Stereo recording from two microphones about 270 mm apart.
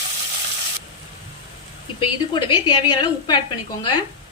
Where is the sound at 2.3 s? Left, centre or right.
Centre.